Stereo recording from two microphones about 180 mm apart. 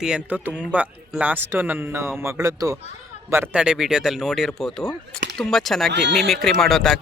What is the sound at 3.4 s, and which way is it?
Speech, 5° right (ahead or behind).